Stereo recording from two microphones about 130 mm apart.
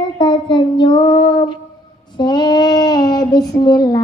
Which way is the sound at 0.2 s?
35° left (ahead or behind).